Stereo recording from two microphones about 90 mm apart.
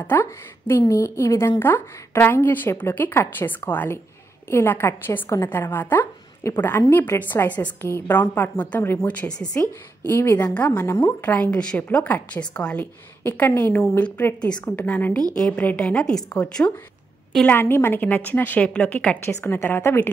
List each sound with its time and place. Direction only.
0.0 s a woman's voice: 25° left (ahead or behind)
9.6 s a woman's voice: 30° left (ahead or behind)
10.4 s a woman's voice: 15° left (ahead or behind)
13.2 s a woman's voice: 25° left (ahead or behind)
15.7 s a woman's voice: 10° left (ahead or behind)
17.5 s a woman's voice: 25° left (ahead or behind)
19.2 s a woman's voice: 25° left (ahead or behind)